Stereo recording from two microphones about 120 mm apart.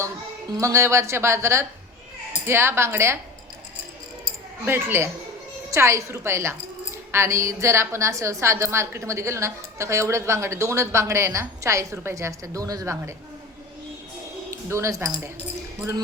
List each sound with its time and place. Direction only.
0.5 s a woman's voice: 25° right (ahead or behind)
4.6 s a woman's voice: 20° right (ahead or behind)
14.5 s speech: 25° right (ahead or behind)